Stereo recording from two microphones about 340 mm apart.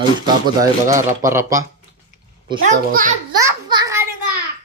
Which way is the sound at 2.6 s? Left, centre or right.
Right.